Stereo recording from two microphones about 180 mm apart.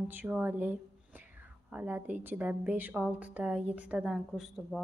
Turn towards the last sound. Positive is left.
turn(degrees=0)  # may be behind; listen again after turning